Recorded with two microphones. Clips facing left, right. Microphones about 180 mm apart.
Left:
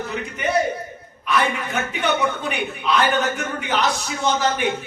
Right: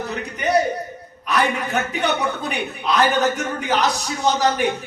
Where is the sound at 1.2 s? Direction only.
40° right (ahead or behind).